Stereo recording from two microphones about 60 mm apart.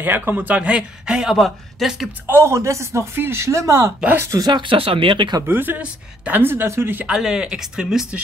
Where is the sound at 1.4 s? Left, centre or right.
Centre.